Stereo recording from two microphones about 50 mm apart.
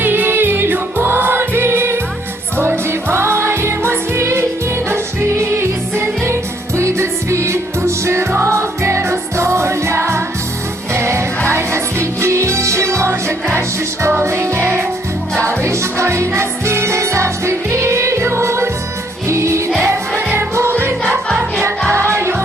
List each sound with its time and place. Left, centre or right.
0.0 s music: right
8.4 s music: right
14.2 s music: right
15.4 s music: right
20.3 s music: right
21.0 s music: centre
22.1 s music: right